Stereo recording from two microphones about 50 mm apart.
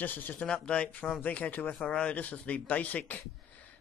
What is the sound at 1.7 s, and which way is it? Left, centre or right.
Speech, left.